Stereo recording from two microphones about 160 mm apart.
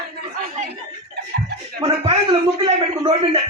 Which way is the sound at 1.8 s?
35° right (ahead or behind).